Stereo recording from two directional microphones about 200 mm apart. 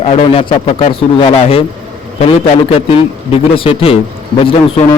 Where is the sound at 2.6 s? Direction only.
30° left (ahead or behind).